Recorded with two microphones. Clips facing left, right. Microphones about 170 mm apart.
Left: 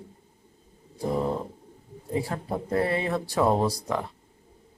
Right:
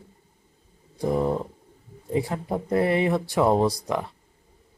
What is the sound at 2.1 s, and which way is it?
Speech, 20° right (ahead or behind).